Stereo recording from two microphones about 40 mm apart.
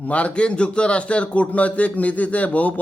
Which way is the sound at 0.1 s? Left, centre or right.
Left.